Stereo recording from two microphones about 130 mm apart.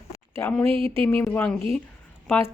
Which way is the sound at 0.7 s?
45° right (ahead or behind).